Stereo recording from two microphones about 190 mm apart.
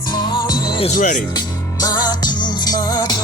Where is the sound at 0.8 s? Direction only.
45° left (ahead or behind).